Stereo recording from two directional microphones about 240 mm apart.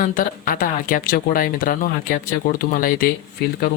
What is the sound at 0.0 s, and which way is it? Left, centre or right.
Speech, left.